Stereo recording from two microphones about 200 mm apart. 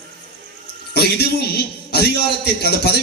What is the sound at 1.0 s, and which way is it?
A man's voice, 55° left (ahead or behind).